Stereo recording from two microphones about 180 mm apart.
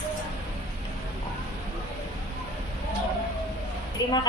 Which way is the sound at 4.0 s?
20° left (ahead or behind).